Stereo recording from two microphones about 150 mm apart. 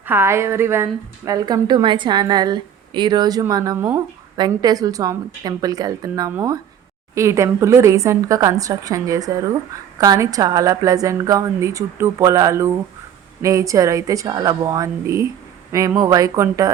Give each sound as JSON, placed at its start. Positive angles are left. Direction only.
{"t": 0.0, "sound": "a woman's voice", "side_deg": -15}
{"t": 3.8, "sound": "a woman's voice", "side_deg": -10}
{"t": 4.4, "sound": "a woman's voice", "side_deg": -25}
{"t": 7.1, "sound": "a woman's voice", "side_deg": -20}